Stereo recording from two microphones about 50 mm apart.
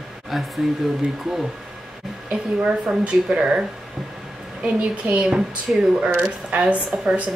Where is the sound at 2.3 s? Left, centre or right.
Right.